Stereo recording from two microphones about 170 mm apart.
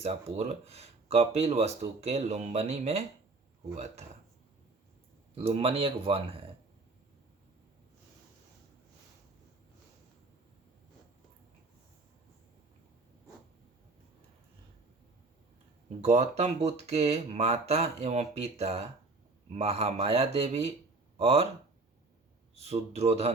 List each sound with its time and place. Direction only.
0.0 s speech: 40° right (ahead or behind)
5.3 s speech: 35° right (ahead or behind)
16.0 s speech: 40° right (ahead or behind)
22.6 s speech: 40° right (ahead or behind)